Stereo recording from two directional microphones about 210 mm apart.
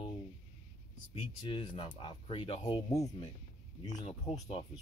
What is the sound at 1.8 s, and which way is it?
Speech, 25° left (ahead or behind).